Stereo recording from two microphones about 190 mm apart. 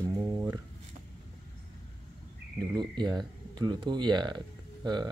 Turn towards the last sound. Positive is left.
turn(degrees=-25)  # may be behind; listen again after turning